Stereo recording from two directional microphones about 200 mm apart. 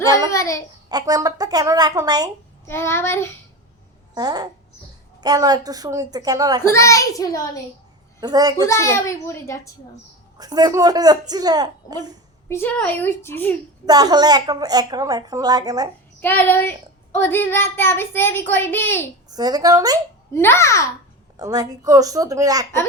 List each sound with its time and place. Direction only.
0.3 s a child's voice: 15° left (ahead or behind)
0.9 s a woman's voice: 20° right (ahead or behind)
2.6 s a child's voice: 10° left (ahead or behind)
4.1 s a woman's voice: 20° right (ahead or behind)
6.6 s a child's voice: 15° left (ahead or behind)
8.2 s a woman's voice: 20° right (ahead or behind)
8.6 s a child's voice: 15° left (ahead or behind)
10.3 s a woman's voice: 20° right (ahead or behind)
12.5 s a child's voice: 10° left (ahead or behind)
13.8 s a woman's voice: 20° right (ahead or behind)
16.2 s a child's voice: 10° left (ahead or behind)
19.3 s a woman's voice: 20° right (ahead or behind)
20.3 s a child's voice: 15° left (ahead or behind)
21.3 s a woman's voice: 20° right (ahead or behind)